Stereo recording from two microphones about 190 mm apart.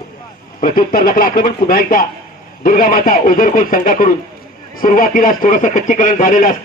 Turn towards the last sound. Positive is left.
turn(degrees=45)  # may be behind; listen again after turning